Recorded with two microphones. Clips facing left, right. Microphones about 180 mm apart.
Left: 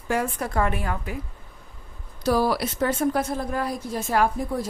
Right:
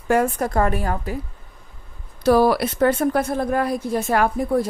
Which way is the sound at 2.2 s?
60° right (ahead or behind).